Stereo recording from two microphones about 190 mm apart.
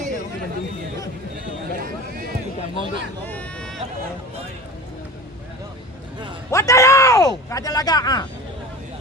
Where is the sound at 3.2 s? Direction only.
10° left (ahead or behind).